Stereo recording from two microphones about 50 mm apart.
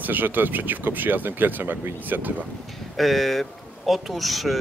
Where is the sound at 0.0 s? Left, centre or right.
Right.